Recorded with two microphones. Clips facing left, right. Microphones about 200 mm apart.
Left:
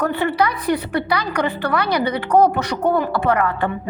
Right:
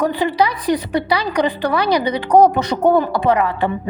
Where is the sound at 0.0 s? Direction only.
10° right (ahead or behind).